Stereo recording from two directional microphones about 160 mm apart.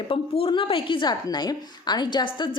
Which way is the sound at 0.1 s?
35° left (ahead or behind).